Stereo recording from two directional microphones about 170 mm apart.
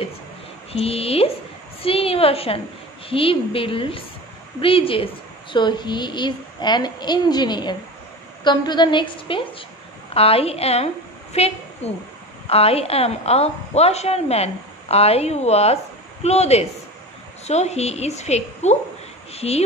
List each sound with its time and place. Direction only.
0.7 s a woman's voice: 35° left (ahead or behind)